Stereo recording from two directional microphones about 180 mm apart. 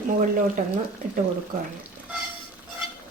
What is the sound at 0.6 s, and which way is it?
Speech, 45° right (ahead or behind).